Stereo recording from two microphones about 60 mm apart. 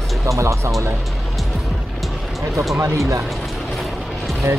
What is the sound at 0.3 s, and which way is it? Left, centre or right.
Speech, right.